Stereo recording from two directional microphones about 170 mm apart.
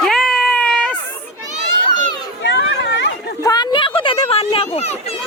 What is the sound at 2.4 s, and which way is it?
Chatter, 90° left.